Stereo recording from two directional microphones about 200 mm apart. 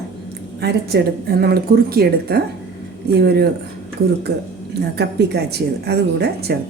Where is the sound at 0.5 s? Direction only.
55° right (ahead or behind).